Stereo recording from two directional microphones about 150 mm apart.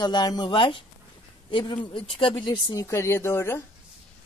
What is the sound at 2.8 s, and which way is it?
Speech, 20° left (ahead or behind).